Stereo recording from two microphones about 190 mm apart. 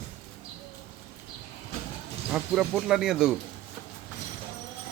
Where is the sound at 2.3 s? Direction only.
5° right (ahead or behind).